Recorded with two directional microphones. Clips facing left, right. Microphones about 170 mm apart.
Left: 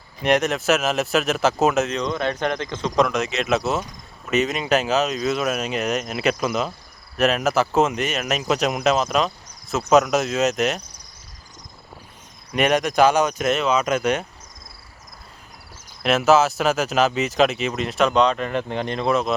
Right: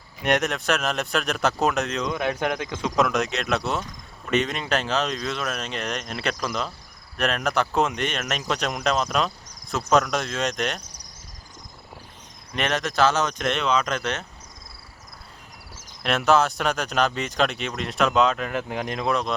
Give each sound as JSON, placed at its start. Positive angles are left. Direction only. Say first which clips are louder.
{"t": 0.2, "sound": "speech", "louder": "left 4 dB", "side_deg": 0}
{"t": 12.5, "sound": "speech", "louder": "left 6 dB", "side_deg": 10}
{"t": 16.0, "sound": "speech", "louder": "left 4 dB", "side_deg": 5}